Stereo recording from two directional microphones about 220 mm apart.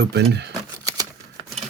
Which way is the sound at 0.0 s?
50° right (ahead or behind).